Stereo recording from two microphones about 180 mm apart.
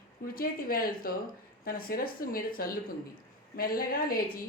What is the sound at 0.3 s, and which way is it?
Speech, 55° left (ahead or behind).